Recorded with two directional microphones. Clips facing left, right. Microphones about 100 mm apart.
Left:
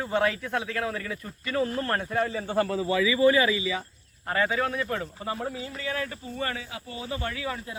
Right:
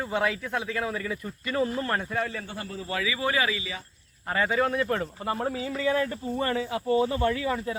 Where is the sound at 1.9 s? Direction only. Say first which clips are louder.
Left 2 dB; 5° left (ahead or behind).